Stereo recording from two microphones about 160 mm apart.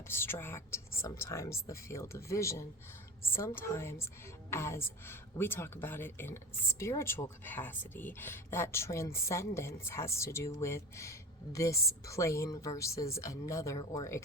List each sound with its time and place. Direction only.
0.1 s a woman's voice: 15° left (ahead or behind)